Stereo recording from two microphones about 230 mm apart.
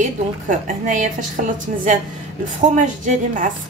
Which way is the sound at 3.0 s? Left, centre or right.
Right.